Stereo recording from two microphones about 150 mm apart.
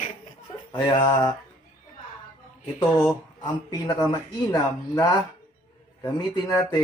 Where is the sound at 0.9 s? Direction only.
30° left (ahead or behind).